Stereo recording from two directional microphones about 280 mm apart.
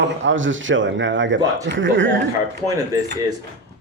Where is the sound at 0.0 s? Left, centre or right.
Right.